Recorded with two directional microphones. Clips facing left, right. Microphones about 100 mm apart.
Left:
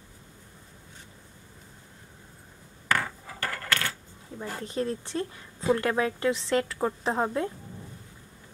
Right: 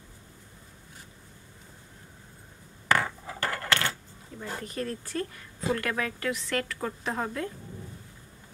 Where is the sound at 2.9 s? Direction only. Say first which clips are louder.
Right 2 dB; 20° right (ahead or behind).